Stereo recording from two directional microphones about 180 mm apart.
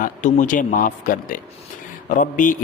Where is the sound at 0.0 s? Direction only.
45° left (ahead or behind).